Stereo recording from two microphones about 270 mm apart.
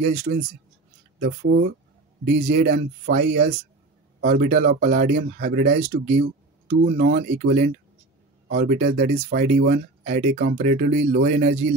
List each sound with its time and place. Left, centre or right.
0.0 s speech: right
2.2 s speech: right
6.7 s speech: right